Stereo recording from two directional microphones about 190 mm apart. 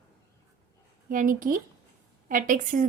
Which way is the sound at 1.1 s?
45° right (ahead or behind).